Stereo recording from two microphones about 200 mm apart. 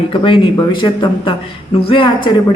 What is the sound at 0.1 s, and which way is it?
A woman's voice, 25° left (ahead or behind).